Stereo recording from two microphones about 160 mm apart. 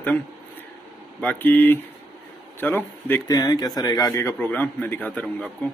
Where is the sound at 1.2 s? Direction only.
10° left (ahead or behind).